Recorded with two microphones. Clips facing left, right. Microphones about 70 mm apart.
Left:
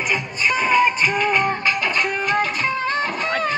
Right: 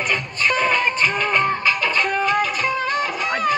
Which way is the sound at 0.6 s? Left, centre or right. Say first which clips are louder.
Left 4 dB; centre.